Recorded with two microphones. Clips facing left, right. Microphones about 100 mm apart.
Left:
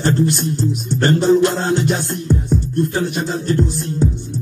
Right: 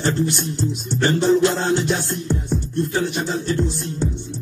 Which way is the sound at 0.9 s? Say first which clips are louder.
Left 3 dB; 45° left (ahead or behind).